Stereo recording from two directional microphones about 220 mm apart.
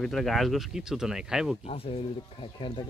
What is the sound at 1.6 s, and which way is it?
Speech, 25° left (ahead or behind).